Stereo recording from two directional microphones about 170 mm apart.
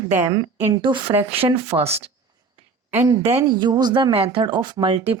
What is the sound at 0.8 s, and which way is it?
Speech, 30° right (ahead or behind).